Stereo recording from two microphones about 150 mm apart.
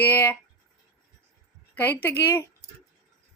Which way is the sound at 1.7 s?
10° left (ahead or behind).